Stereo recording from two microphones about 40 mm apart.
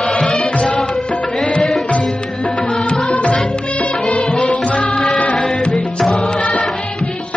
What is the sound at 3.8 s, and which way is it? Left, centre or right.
Music, left.